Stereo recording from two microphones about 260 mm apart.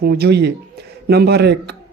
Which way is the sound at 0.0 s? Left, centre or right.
Right.